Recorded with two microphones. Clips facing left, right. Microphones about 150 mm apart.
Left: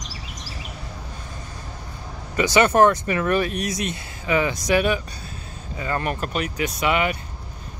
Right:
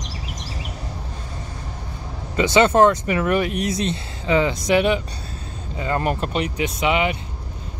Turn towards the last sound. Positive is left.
turn(degrees=-20)  # may be behind; listen again after turning